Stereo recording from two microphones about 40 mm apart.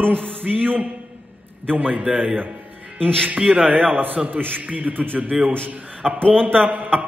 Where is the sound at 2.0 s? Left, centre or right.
Centre.